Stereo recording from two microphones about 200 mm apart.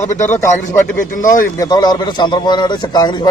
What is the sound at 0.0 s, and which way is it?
Speech, 35° left (ahead or behind).